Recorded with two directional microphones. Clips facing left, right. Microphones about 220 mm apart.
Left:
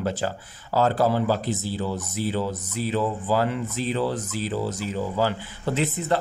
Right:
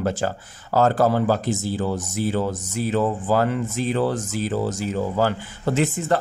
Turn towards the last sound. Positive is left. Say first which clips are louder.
# right 3 dB
turn(degrees=-45)  # may be behind; listen again after turning